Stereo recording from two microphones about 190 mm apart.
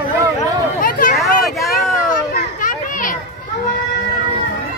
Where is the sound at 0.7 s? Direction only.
45° left (ahead or behind).